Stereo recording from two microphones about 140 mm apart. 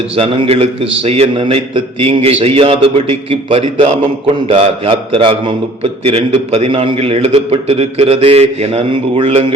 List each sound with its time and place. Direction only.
0.2 s a man's voice: 45° right (ahead or behind)